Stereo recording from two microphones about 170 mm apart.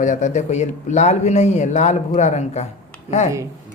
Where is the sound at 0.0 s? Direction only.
45° left (ahead or behind).